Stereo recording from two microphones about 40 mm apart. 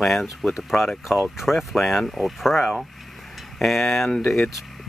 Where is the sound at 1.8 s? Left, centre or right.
Centre.